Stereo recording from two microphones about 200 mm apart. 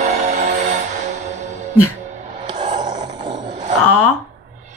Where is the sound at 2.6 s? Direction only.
40° right (ahead or behind).